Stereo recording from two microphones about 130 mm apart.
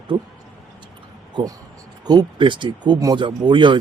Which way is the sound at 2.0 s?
30° right (ahead or behind).